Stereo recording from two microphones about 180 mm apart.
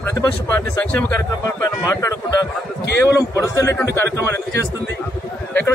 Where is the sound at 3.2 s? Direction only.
15° left (ahead or behind).